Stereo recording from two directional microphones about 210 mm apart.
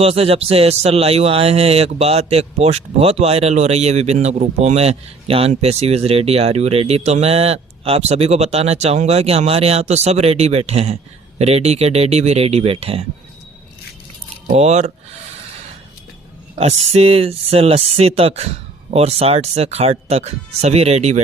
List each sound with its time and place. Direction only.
0.0 s speech: 30° right (ahead or behind)
14.5 s speech: 30° right (ahead or behind)
16.6 s speech: 30° right (ahead or behind)